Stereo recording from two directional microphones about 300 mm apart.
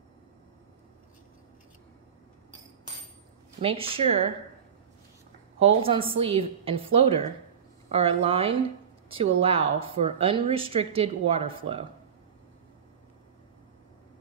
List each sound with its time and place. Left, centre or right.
3.6 s speech: centre
5.6 s speech: centre